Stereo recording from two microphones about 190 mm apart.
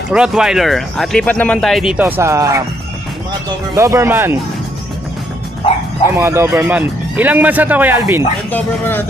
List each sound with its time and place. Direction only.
0.1 s speech: 5° right (ahead or behind)
3.7 s speech: 15° right (ahead or behind)
6.0 s speech: 15° right (ahead or behind)
8.5 s speech: 10° left (ahead or behind)